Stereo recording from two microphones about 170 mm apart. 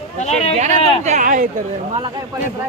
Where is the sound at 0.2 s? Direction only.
40° left (ahead or behind).